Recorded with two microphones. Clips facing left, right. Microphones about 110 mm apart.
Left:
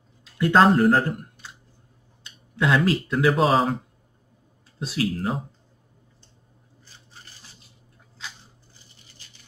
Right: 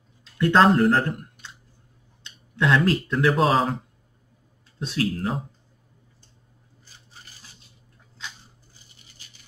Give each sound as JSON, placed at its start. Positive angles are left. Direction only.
{"t": 0.2, "sound": "speech", "side_deg": 5}
{"t": 2.2, "sound": "speech", "side_deg": 5}